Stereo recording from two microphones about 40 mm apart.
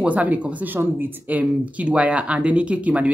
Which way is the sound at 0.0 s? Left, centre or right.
Right.